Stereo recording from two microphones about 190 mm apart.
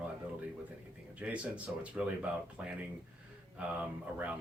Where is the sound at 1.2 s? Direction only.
5° right (ahead or behind).